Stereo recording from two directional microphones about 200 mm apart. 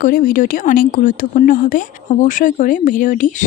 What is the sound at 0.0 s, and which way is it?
Speech, 45° left (ahead or behind).